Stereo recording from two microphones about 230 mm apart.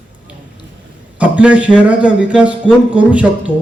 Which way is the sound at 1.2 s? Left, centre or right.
Centre.